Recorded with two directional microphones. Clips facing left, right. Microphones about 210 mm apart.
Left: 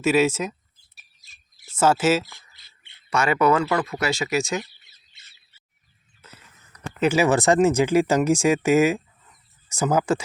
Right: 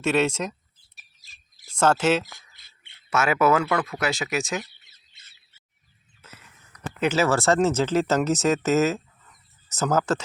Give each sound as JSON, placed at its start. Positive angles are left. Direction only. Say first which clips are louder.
{"t": 0.0, "sound": "speech", "louder": "left 3 dB", "side_deg": 5}
{"t": 1.7, "sound": "speech", "louder": "left 1 dB", "side_deg": 5}
{"t": 2.2, "sound": "a sound", "louder": "right 1 dB", "side_deg": -50}
{"t": 3.1, "sound": "speech", "louder": "left 1 dB", "side_deg": -5}
{"t": 7.0, "sound": "speech", "louder": "left 3 dB", "side_deg": 10}